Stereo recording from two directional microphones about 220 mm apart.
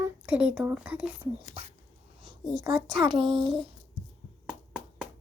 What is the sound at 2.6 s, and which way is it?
A child's voice, 20° right (ahead or behind).